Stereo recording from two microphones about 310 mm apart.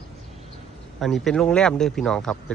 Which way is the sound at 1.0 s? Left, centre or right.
Centre.